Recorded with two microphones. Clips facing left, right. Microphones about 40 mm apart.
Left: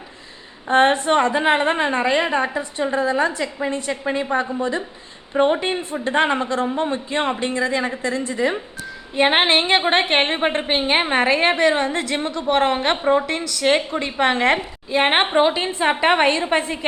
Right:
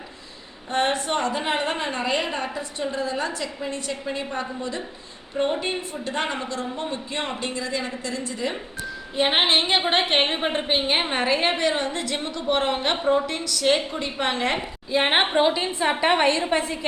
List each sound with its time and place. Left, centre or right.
0.7 s speech: left
5.3 s speech: left
9.1 s a woman's voice: left
13.4 s a woman's voice: centre
13.7 s a woman's voice: left
14.8 s a woman's voice: centre